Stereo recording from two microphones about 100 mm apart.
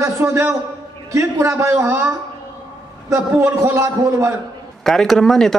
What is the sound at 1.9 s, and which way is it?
A man's voice, 15° right (ahead or behind).